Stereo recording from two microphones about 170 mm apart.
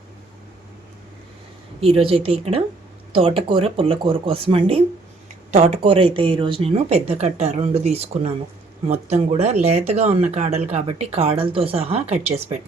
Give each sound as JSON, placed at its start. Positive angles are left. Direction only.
{"t": 1.8, "sound": "speech", "side_deg": -35}